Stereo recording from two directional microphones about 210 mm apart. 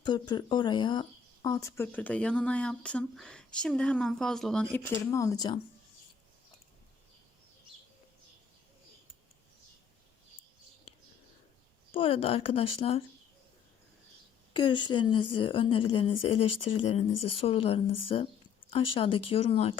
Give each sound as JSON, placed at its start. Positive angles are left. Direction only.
{"t": 0.0, "sound": "speech", "side_deg": 20}
{"t": 11.9, "sound": "a woman's voice", "side_deg": 25}
{"t": 14.5, "sound": "a woman's voice", "side_deg": 20}